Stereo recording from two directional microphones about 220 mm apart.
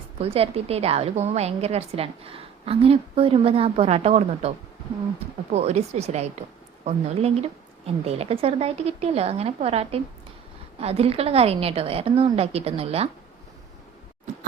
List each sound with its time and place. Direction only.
0.2 s a woman's voice: 25° right (ahead or behind)